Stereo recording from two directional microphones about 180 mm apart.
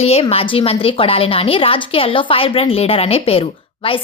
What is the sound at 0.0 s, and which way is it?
A woman's voice, 35° left (ahead or behind).